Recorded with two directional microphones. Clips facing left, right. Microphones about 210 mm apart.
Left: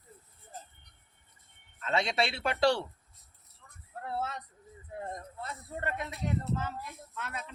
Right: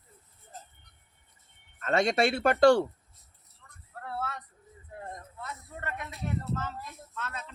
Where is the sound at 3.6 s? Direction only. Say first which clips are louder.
Even; 10° left (ahead or behind).